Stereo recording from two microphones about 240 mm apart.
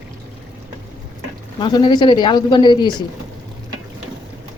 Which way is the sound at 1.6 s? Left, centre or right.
Centre.